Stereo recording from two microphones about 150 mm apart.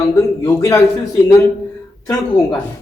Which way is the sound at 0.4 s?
20° left (ahead or behind).